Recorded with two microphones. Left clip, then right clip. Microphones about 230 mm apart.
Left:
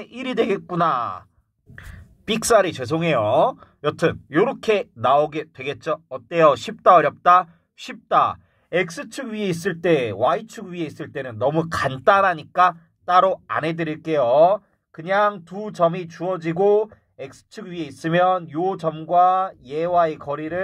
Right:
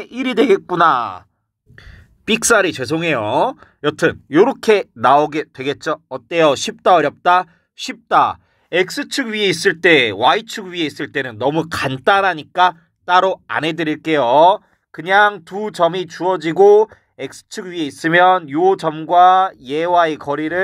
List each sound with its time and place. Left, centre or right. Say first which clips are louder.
0.0 s speech: right 6 dB; right